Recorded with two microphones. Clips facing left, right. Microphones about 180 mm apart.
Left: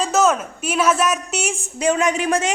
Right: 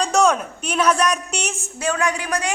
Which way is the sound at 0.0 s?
5° left (ahead or behind).